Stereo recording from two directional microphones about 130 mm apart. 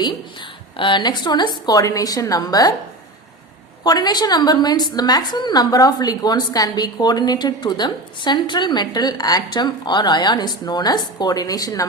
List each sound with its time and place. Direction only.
0.8 s a woman's voice: 35° left (ahead or behind)
3.8 s a woman's voice: 30° left (ahead or behind)